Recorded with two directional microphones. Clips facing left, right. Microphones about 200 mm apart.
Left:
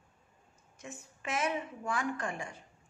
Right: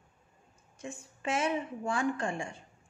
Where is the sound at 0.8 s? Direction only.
30° right (ahead or behind).